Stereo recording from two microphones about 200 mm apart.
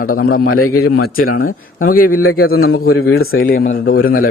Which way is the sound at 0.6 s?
90° left.